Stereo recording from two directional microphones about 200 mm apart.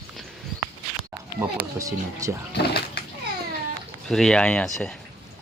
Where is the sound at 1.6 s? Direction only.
15° right (ahead or behind).